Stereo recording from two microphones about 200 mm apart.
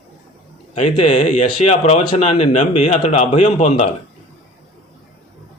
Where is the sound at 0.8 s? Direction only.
35° left (ahead or behind).